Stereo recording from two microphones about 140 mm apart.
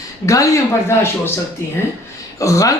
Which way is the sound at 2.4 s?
25° left (ahead or behind).